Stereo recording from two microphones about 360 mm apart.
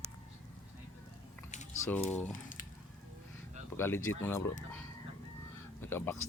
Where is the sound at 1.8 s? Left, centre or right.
Centre.